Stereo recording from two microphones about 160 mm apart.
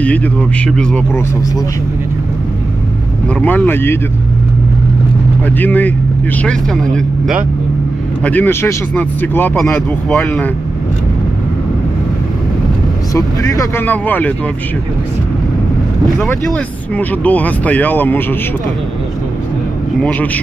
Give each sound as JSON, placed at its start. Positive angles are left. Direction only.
{"t": 0.0, "sound": "speech", "side_deg": 10}
{"t": 3.3, "sound": "speech", "side_deg": 10}
{"t": 5.6, "sound": "speech", "side_deg": 10}
{"t": 8.2, "sound": "speech", "side_deg": 10}
{"t": 13.1, "sound": "speech", "side_deg": 20}
{"t": 13.8, "sound": "speech", "side_deg": 10}
{"t": 16.2, "sound": "speech", "side_deg": 5}
{"t": 20.0, "sound": "speech", "side_deg": 10}